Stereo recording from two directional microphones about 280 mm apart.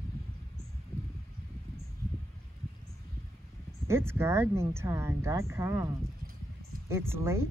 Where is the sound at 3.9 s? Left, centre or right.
Centre.